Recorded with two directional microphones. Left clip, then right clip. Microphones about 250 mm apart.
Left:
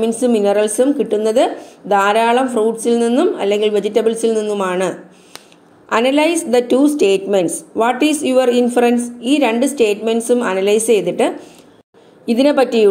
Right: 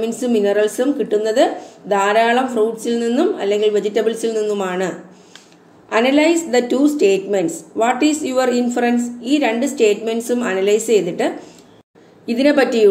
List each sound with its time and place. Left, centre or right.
0.0 s a woman's voice: centre